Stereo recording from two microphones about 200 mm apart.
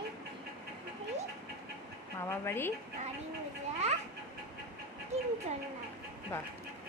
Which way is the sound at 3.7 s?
35° right (ahead or behind).